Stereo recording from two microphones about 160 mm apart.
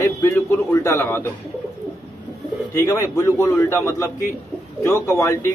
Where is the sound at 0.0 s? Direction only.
15° left (ahead or behind).